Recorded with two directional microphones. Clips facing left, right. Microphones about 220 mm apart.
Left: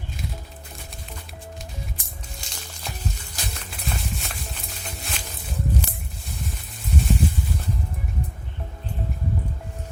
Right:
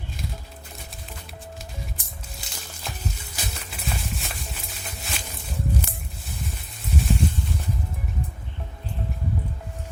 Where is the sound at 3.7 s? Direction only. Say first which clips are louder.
Left 1 dB; centre (ahead or behind).